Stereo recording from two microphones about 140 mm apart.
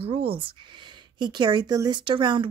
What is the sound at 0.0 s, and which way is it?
Speech, 40° right (ahead or behind).